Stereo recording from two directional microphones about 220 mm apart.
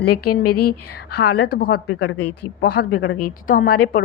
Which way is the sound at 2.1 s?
90° left.